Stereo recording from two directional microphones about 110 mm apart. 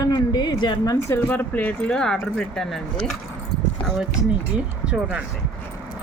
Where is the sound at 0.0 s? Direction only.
40° left (ahead or behind).